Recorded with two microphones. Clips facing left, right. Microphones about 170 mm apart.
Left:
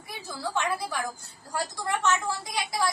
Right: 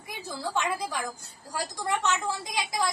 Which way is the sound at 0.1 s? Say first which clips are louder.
Even; 15° right (ahead or behind).